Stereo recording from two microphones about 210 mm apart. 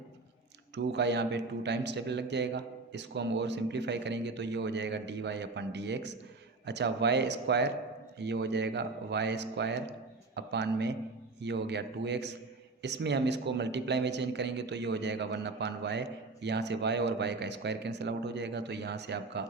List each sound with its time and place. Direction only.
0.8 s a man's voice: 55° right (ahead or behind)